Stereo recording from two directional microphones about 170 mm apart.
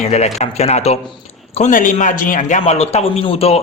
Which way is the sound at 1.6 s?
50° left (ahead or behind).